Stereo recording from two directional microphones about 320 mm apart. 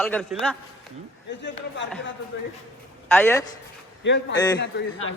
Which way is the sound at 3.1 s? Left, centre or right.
Centre.